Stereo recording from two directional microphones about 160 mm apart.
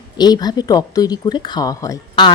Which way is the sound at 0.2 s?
25° left (ahead or behind).